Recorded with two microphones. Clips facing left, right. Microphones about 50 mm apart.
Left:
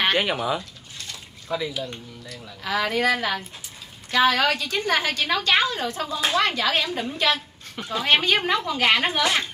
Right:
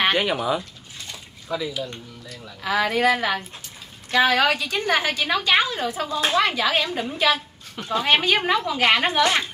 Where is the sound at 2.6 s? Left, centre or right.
Centre.